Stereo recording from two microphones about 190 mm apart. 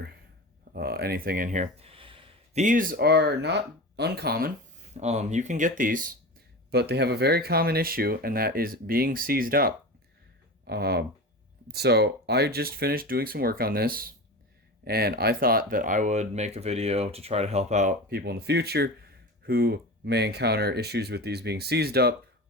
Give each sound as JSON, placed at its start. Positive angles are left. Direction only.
{"t": 0.7, "sound": "a sound", "side_deg": -55}
{"t": 2.6, "sound": "speech", "side_deg": -45}
{"t": 4.9, "sound": "speech", "side_deg": -35}
{"t": 6.7, "sound": "speech", "side_deg": -60}
{"t": 18.1, "sound": "speech", "side_deg": -55}